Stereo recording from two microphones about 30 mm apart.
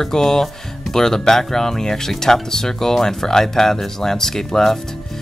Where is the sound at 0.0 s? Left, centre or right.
Centre.